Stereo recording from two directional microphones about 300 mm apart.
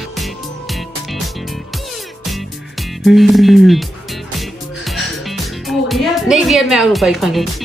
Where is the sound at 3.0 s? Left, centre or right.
Centre.